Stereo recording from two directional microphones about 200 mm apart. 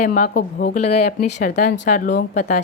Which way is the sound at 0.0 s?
45° left (ahead or behind).